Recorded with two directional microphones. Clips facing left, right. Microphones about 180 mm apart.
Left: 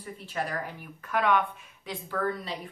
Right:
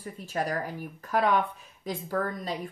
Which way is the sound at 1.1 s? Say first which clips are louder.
Right 1 dB; 35° right (ahead or behind).